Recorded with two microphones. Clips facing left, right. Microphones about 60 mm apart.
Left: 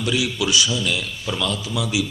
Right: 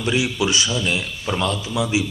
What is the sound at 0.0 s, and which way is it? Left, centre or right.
A man's voice, right.